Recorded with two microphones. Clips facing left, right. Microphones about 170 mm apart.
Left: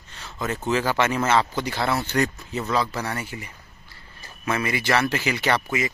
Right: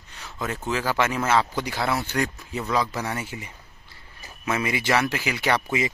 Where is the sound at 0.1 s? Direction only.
10° right (ahead or behind).